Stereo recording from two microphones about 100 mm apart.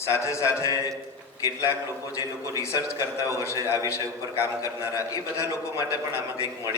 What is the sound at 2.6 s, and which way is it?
A man's voice, 30° left (ahead or behind).